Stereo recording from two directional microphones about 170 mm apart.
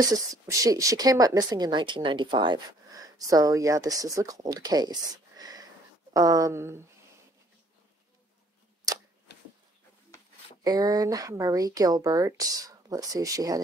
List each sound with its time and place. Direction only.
0.0 s a woman's voice: 20° right (ahead or behind)
5.4 s a sound: 20° right (ahead or behind)
6.1 s a woman's voice: 20° right (ahead or behind)
10.6 s a woman's voice: 20° right (ahead or behind)